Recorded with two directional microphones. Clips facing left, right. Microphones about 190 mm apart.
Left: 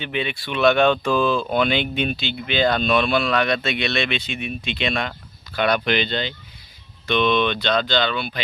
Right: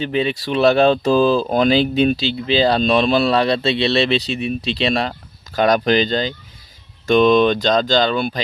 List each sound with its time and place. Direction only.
0.0 s speech: 35° right (ahead or behind)